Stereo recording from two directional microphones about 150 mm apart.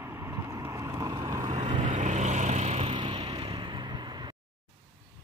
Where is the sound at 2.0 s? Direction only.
55° right (ahead or behind); by 4.4 s 30° right (ahead or behind).